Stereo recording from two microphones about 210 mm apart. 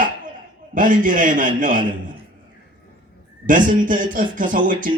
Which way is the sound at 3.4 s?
40° right (ahead or behind).